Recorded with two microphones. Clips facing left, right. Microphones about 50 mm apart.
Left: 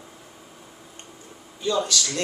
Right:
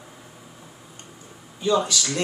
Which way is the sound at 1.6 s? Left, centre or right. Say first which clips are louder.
Right 2 dB; centre.